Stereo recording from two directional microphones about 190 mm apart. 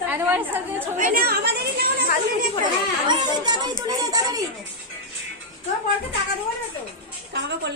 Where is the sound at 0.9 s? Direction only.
45° right (ahead or behind).